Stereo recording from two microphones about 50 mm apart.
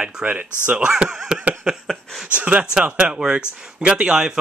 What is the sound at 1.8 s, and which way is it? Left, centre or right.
Speech, centre.